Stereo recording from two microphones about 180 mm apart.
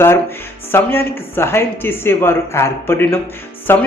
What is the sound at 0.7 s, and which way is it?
A man's voice, 10° left (ahead or behind).